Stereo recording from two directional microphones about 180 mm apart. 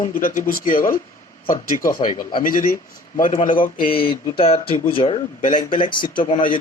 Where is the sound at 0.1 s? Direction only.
50° left (ahead or behind).